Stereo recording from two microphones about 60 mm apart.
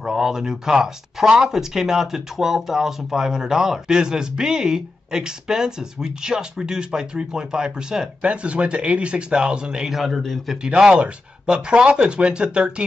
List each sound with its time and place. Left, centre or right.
0.0 s speech: centre
9.9 s a man's voice: centre
10.6 s speech: centre